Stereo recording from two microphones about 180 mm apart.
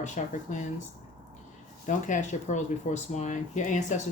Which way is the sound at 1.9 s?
45° left (ahead or behind).